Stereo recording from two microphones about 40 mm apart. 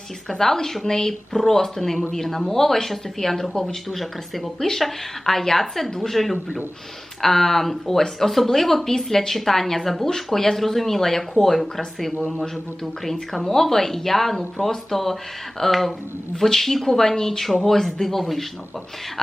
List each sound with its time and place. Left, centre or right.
0.3 s speech: centre
3.5 s speech: centre
3.8 s a woman's voice: centre